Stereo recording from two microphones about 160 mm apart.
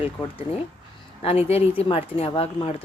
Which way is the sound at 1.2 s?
40° left (ahead or behind).